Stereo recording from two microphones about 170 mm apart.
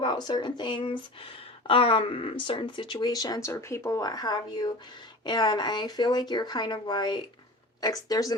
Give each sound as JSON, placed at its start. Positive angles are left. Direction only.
{"t": 0.0, "sound": "speech", "side_deg": 25}